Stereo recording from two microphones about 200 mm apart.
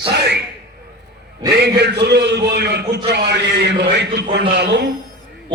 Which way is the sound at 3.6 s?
55° right (ahead or behind).